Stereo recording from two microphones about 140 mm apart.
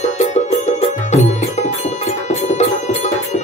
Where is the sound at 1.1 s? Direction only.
55° left (ahead or behind).